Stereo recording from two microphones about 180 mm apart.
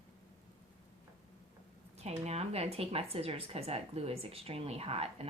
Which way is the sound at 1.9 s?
35° right (ahead or behind).